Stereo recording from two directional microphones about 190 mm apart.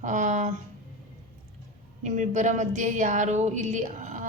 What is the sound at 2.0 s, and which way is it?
A woman's voice, 40° right (ahead or behind).